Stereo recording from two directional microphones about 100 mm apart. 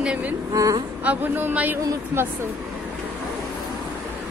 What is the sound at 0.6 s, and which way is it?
Speech, 35° right (ahead or behind).